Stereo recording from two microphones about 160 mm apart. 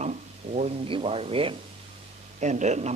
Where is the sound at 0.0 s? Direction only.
45° right (ahead or behind).